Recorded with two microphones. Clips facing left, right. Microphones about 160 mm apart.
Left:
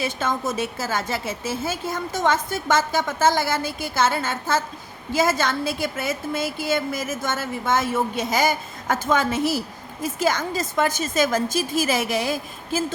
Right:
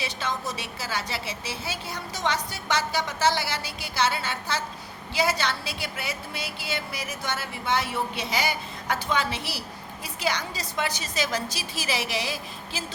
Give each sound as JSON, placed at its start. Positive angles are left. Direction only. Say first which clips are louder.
{"t": 0.0, "sound": "a woman's voice", "louder": "left 6 dB", "side_deg": 50}